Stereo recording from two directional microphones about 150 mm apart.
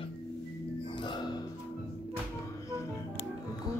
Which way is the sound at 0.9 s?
30° left (ahead or behind).